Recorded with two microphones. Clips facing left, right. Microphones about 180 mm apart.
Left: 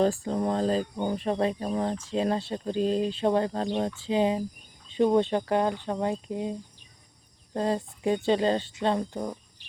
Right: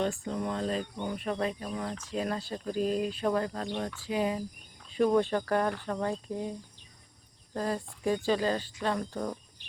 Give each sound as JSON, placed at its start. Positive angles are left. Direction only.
{"t": 0.0, "sound": "speech", "side_deg": 35}